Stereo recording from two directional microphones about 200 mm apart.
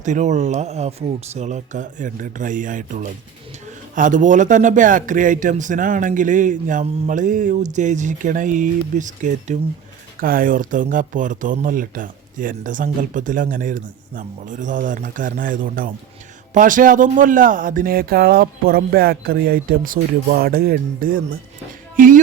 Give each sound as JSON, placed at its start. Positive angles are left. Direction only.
{"t": 0.0, "sound": "a man's voice", "side_deg": -35}
{"t": 21.9, "sound": "music", "side_deg": -40}